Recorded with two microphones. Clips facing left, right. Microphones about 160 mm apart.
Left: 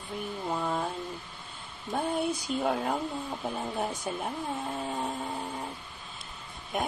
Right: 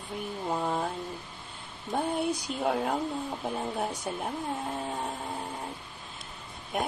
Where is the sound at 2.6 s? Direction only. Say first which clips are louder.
Right 3 dB; centre (ahead or behind).